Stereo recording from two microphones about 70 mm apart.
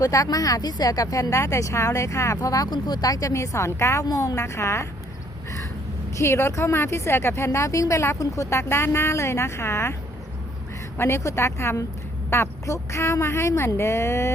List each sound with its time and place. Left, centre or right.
0.0 s speech: left
4.0 s a woman's voice: left
4.4 s speech: left
6.1 s speech: left
10.9 s speech: left